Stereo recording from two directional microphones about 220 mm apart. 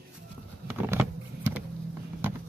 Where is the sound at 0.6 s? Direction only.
10° right (ahead or behind).